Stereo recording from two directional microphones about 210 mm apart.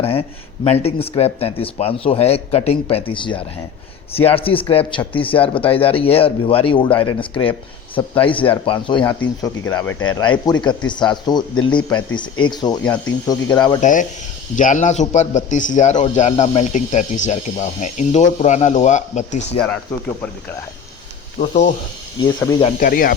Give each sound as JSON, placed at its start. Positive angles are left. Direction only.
{"t": 0.0, "sound": "speech", "side_deg": 25}
{"t": 13.8, "sound": "a man's voice", "side_deg": 40}
{"t": 19.5, "sound": "speech", "side_deg": 5}
{"t": 21.3, "sound": "a man's voice", "side_deg": 30}
{"t": 22.2, "sound": "speech", "side_deg": 20}
{"t": 22.8, "sound": "speech", "side_deg": 40}